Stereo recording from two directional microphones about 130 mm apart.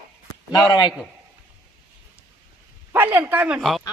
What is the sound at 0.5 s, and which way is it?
Speech, 30° left (ahead or behind).